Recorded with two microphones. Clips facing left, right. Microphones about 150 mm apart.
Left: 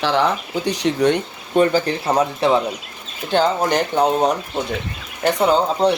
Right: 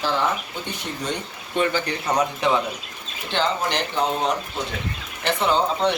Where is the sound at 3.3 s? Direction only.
45° left (ahead or behind).